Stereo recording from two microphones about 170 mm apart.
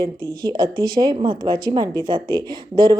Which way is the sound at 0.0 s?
25° right (ahead or behind).